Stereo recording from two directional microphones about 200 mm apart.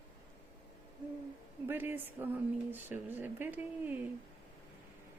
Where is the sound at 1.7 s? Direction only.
10° right (ahead or behind).